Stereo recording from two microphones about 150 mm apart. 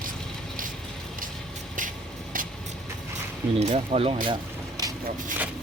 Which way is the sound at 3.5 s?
45° right (ahead or behind).